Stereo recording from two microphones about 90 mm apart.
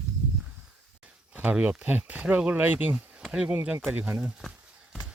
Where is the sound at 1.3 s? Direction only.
15° right (ahead or behind).